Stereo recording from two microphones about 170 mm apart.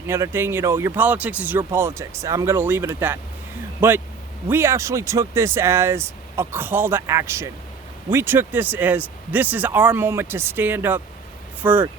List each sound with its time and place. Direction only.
0.1 s speech: 15° right (ahead or behind)